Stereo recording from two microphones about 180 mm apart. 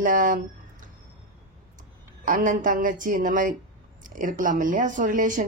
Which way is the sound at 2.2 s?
45° right (ahead or behind).